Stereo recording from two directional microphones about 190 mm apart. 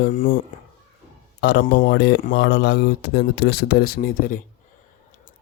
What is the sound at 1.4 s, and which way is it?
Speech, 60° left (ahead or behind).